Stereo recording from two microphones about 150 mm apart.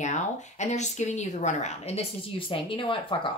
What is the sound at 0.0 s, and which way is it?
A woman's voice, 50° left (ahead or behind).